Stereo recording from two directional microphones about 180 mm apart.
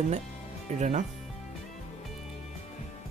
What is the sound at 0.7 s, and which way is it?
Speech, 40° right (ahead or behind).